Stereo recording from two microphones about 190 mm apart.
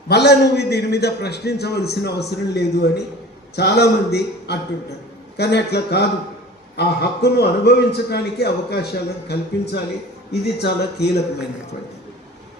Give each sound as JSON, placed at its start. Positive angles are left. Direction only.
{"t": 0.1, "sound": "a man's voice", "side_deg": 60}